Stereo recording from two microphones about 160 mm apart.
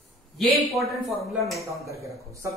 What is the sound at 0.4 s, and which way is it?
Speech, centre (ahead or behind).